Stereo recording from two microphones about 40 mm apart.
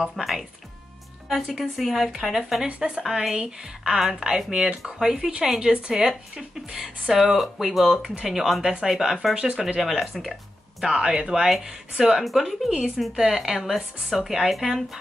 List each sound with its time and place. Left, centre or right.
0.1 s a woman's voice: centre
1.5 s a woman's voice: centre
2.6 s a woman's voice: centre
10.8 s a woman's voice: centre
12.0 s a woman's voice: centre
12.7 s a woman's voice: centre